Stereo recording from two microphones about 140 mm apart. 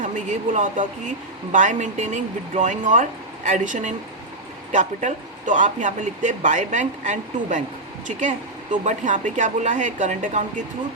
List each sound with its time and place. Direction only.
0.0 s speech: 65° right (ahead or behind)
8.7 s speech: 65° right (ahead or behind)